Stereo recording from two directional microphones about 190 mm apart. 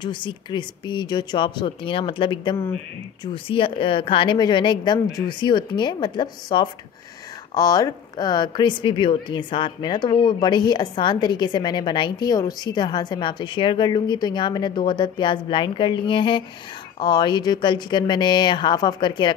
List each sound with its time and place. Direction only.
0.0 s speech: 25° left (ahead or behind)